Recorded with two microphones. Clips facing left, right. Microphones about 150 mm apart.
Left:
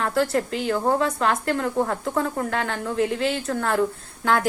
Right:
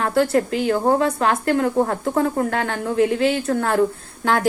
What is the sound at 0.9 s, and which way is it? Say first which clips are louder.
Speech: right 3 dB; 50° right (ahead or behind).